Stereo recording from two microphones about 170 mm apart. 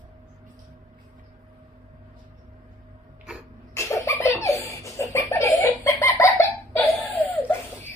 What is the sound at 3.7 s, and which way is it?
Laughter, 15° left (ahead or behind).